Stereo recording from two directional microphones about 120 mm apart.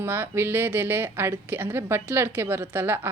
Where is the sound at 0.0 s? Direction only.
20° right (ahead or behind).